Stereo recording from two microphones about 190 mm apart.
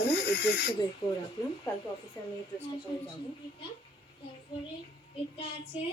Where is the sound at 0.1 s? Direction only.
65° left (ahead or behind).